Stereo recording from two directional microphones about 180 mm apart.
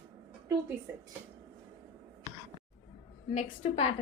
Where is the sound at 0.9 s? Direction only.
15° right (ahead or behind).